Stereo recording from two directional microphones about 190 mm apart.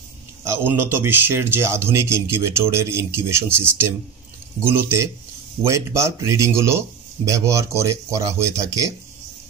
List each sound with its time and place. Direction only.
0.4 s speech: 10° right (ahead or behind)